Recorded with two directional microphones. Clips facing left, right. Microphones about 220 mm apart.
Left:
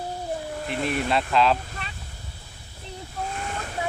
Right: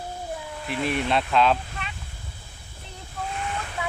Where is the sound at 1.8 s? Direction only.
40° left (ahead or behind).